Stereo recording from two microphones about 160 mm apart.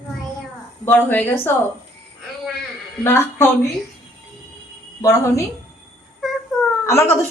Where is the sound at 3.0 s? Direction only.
15° left (ahead or behind).